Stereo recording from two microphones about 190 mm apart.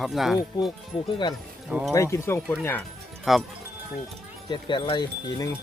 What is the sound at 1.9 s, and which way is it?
Speech, 15° left (ahead or behind).